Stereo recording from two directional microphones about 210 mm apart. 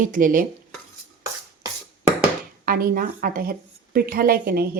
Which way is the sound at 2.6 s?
40° right (ahead or behind).